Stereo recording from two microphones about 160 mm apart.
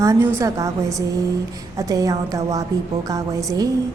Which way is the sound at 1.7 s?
20° right (ahead or behind).